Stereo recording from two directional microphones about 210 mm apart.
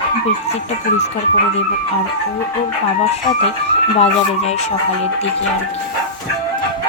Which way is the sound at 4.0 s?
30° left (ahead or behind).